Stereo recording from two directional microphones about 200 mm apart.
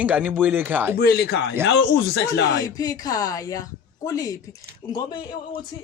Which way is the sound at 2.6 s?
20° left (ahead or behind).